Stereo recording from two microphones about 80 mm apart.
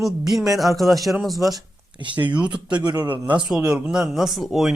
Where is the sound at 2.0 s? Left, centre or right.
Right.